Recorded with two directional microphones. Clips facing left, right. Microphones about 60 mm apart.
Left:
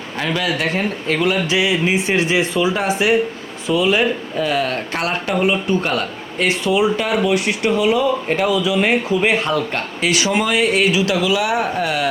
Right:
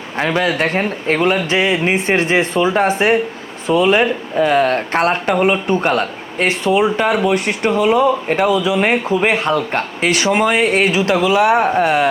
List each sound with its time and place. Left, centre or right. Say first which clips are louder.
0.2 s speech: right 4 dB; right